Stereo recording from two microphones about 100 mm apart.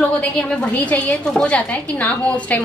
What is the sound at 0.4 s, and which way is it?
A woman's voice, 15° left (ahead or behind).